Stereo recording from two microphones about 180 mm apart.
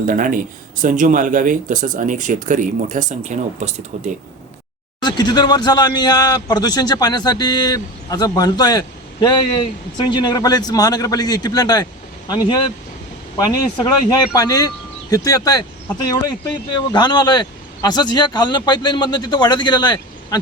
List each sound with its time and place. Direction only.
0.1 s speech: 50° right (ahead or behind)
5.0 s speech: 25° left (ahead or behind)
16.9 s speech: 25° left (ahead or behind)